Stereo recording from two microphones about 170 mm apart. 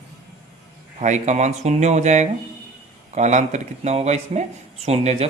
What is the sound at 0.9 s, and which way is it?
Speech, 45° right (ahead or behind).